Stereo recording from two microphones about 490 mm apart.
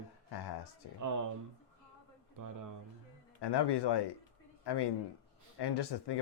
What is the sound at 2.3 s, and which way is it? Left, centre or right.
Speech, right.